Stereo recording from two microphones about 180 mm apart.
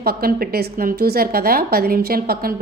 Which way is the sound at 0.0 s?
55° right (ahead or behind).